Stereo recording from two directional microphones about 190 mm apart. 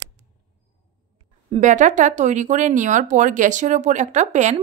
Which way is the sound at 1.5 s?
40° right (ahead or behind).